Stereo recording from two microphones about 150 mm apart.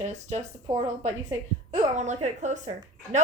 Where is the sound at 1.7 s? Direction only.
50° right (ahead or behind).